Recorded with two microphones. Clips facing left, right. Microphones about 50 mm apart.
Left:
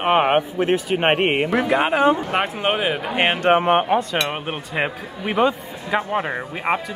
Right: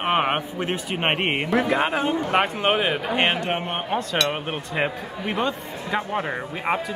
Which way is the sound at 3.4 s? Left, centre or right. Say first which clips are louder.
Left 10 dB; left.